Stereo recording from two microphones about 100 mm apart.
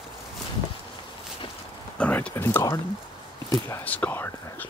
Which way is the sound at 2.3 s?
25° left (ahead or behind).